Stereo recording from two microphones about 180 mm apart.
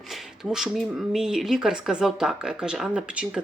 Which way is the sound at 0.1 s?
5° right (ahead or behind).